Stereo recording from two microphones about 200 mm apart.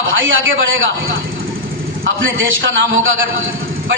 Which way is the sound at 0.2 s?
75° right (ahead or behind).